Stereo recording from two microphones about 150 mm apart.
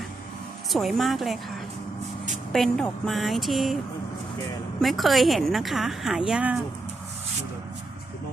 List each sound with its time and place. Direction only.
0.7 s a woman's voice: centre (ahead or behind)
2.5 s a woman's voice: 5° left (ahead or behind)
4.8 s a woman's voice: centre (ahead or behind)